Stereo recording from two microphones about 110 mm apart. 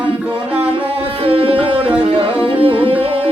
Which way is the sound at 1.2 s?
60° right (ahead or behind).